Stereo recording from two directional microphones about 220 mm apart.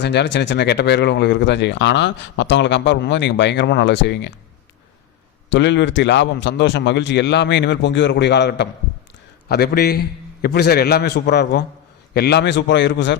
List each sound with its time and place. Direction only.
0.0 s speech: 50° left (ahead or behind)
5.5 s speech: 55° left (ahead or behind)